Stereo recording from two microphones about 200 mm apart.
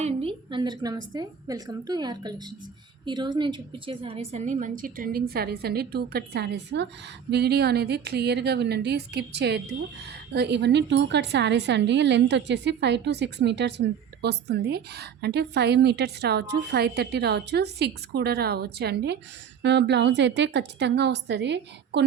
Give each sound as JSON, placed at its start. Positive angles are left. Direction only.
{"t": 0.0, "sound": "a woman's voice", "side_deg": -30}